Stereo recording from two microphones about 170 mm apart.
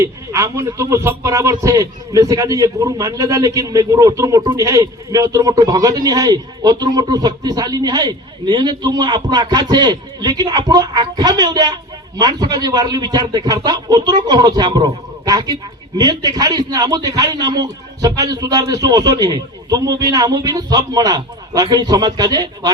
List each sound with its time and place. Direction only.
0.0 s speech: 15° right (ahead or behind)